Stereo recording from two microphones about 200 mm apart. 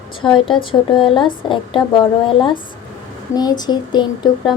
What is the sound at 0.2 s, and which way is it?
A woman's voice, 25° left (ahead or behind).